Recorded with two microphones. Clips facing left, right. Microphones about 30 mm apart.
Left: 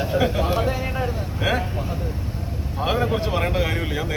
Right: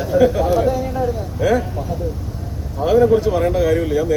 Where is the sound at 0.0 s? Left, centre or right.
Left.